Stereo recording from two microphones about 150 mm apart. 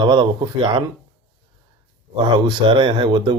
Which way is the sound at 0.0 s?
30° right (ahead or behind).